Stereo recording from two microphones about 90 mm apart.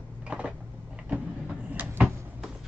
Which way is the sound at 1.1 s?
15° right (ahead or behind).